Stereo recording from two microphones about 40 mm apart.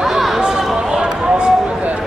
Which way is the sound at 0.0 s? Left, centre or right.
Centre.